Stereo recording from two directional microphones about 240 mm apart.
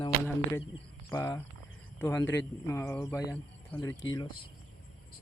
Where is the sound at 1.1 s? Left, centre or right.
Centre.